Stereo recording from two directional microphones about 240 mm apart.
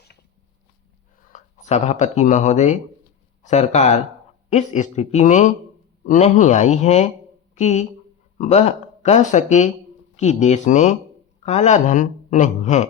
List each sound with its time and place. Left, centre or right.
1.3 s speech: left